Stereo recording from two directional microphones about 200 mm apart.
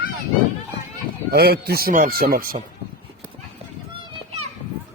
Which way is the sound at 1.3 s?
50° right (ahead or behind).